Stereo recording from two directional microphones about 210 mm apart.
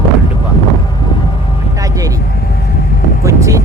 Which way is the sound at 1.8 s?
15° right (ahead or behind).